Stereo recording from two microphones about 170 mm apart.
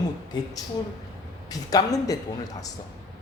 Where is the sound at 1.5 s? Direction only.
20° left (ahead or behind).